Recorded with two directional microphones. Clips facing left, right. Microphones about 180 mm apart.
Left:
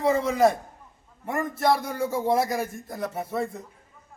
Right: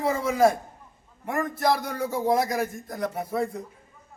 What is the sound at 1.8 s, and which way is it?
Speech, 25° left (ahead or behind).